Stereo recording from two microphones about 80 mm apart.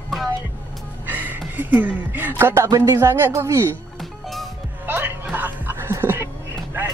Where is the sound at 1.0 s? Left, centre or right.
Right.